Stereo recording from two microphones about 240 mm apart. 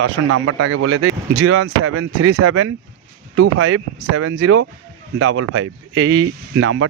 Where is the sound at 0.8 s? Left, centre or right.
Right.